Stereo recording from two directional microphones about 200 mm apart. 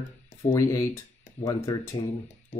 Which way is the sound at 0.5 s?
15° left (ahead or behind).